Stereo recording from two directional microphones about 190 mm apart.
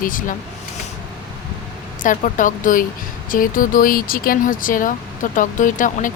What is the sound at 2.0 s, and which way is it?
Speech, 45° left (ahead or behind).